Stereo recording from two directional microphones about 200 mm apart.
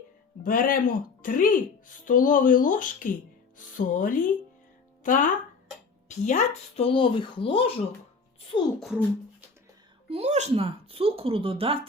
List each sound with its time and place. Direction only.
0.4 s speech: 45° left (ahead or behind); by 7.7 s 25° left (ahead or behind)
10.1 s speech: 35° right (ahead or behind)